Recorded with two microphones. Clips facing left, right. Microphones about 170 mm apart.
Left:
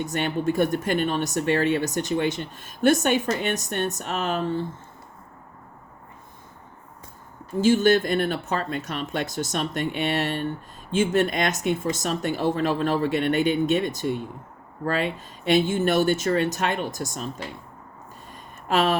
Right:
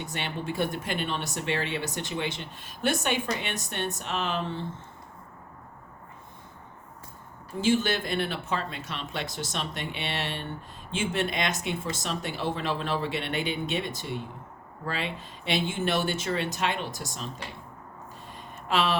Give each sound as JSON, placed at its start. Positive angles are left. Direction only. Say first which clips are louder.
{"t": 0.0, "sound": "speech", "louder": "left 9 dB", "side_deg": 45}
{"t": 7.6, "sound": "speech", "louder": "left 7 dB", "side_deg": 45}
{"t": 18.3, "sound": "a sound", "louder": "left 4 dB", "side_deg": 45}